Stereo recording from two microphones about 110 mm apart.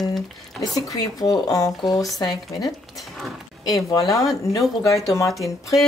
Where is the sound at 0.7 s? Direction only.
35° left (ahead or behind).